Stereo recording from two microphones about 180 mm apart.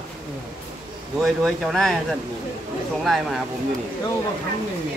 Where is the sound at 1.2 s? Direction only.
Centre (ahead or behind).